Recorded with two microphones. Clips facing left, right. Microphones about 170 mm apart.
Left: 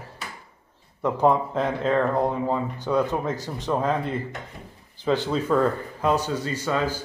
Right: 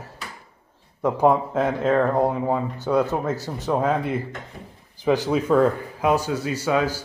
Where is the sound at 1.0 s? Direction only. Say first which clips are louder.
Right 2 dB; 10° right (ahead or behind).